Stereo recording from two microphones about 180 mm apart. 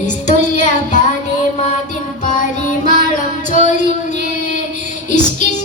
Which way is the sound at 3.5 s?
45° left (ahead or behind).